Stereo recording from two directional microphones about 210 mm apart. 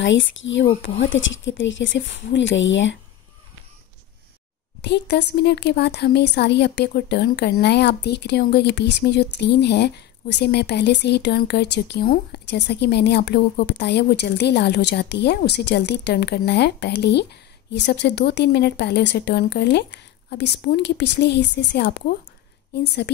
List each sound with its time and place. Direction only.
0.0 s a woman's voice: 60° left (ahead or behind)
4.8 s a woman's voice: 55° left (ahead or behind)